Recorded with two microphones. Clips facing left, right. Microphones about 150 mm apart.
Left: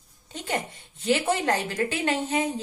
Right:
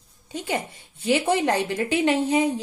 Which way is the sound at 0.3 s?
10° right (ahead or behind).